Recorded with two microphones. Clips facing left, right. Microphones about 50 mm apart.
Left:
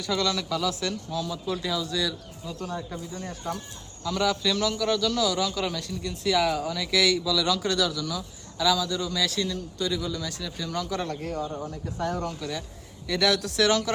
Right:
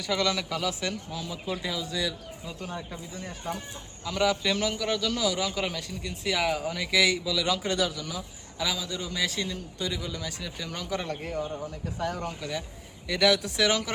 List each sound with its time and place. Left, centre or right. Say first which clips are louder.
0.0 s a man's voice: left 1 dB; right